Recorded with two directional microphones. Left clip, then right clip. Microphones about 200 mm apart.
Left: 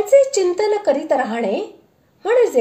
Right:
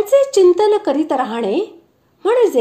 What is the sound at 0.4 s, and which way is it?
A woman's voice, 30° right (ahead or behind).